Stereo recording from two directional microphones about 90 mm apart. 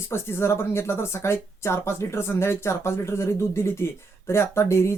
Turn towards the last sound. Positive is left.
turn(degrees=30)  # may be behind; listen again after turning